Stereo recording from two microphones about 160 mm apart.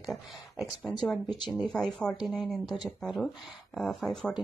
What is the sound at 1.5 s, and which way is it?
A woman's voice, centre (ahead or behind).